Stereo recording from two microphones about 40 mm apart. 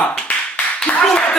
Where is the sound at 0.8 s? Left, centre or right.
Left.